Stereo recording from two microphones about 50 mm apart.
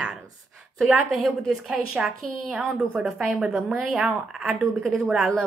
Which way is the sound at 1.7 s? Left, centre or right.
Centre.